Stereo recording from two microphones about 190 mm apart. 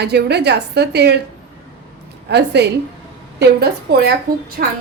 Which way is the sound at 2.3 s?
60° right (ahead or behind).